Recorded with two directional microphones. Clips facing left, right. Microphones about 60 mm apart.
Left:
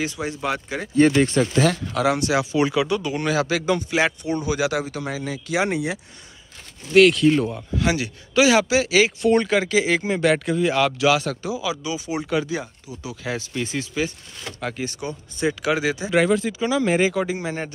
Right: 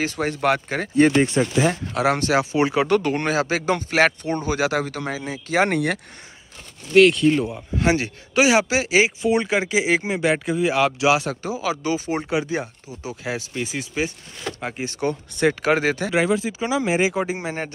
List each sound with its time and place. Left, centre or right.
0.0 s speech: right
0.9 s speech: right
2.9 s speech: right
6.9 s speech: centre
7.8 s speech: right
9.2 s speech: centre
11.4 s speech: right
13.2 s speech: centre
14.9 s speech: right
15.6 s speech: right
16.1 s speech: centre
16.5 s speech: right
17.1 s speech: right